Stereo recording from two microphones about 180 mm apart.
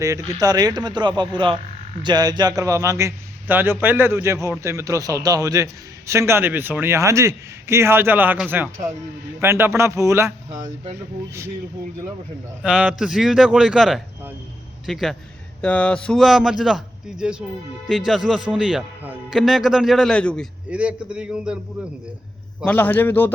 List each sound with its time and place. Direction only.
0.0 s a man's voice: 20° right (ahead or behind)
12.6 s a man's voice: 5° right (ahead or behind)
20.7 s a man's voice: 5° right (ahead or behind)
22.6 s a man's voice: 10° left (ahead or behind)